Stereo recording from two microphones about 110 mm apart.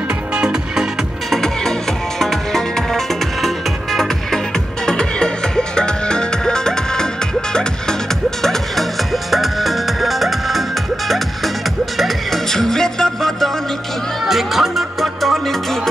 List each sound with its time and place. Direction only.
0.3 s music: 5° right (ahead or behind)
1.3 s music: 5° left (ahead or behind)
8.4 s music: centre (ahead or behind)